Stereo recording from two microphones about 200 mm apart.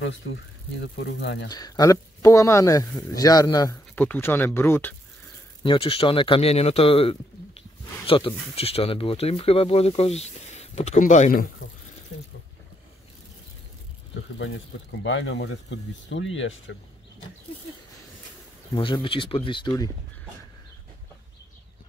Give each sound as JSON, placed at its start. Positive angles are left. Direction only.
{"t": 1.2, "sound": "speech", "side_deg": 60}
{"t": 1.5, "sound": "speech", "side_deg": 20}
{"t": 5.6, "sound": "speech", "side_deg": 25}
{"t": 14.4, "sound": "speech", "side_deg": 65}
{"t": 18.8, "sound": "speech", "side_deg": 25}